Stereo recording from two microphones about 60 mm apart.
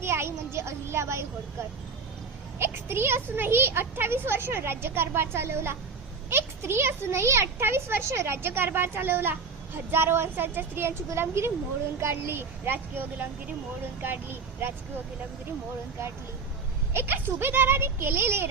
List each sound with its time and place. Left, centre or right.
0.0 s speech: right
2.6 s a child's voice: right
16.9 s a child's voice: right